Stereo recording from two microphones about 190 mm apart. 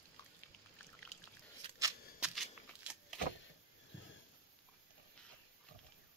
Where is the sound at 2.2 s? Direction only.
Centre (ahead or behind).